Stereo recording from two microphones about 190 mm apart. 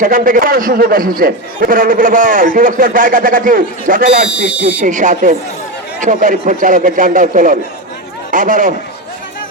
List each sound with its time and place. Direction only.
0.0 s a man's voice: 45° right (ahead or behind)
4.3 s speech: 5° right (ahead or behind)
4.8 s a man's voice: 40° right (ahead or behind)